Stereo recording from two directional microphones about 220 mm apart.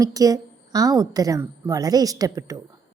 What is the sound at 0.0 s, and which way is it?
A woman's voice, 15° right (ahead or behind).